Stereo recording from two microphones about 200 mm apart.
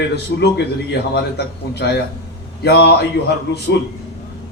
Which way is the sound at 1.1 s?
55° left (ahead or behind).